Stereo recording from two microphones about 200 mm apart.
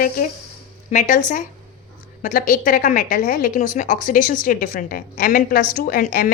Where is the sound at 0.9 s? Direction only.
40° left (ahead or behind).